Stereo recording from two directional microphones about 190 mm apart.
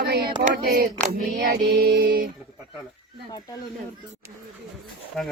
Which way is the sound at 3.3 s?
20° left (ahead or behind).